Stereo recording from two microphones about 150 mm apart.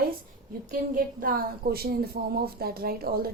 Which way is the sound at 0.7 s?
70° right (ahead or behind).